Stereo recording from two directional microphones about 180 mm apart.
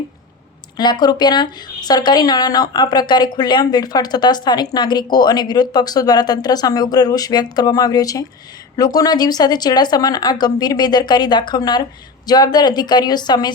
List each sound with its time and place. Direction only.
0.8 s speech: 25° left (ahead or behind)